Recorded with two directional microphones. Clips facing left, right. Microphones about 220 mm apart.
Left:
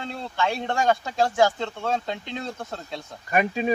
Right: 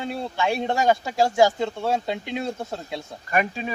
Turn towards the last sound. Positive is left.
turn(degrees=20)  # may be behind; listen again after turning